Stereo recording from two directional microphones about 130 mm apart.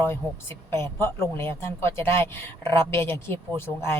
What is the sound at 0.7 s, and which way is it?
A woman's voice, 20° left (ahead or behind).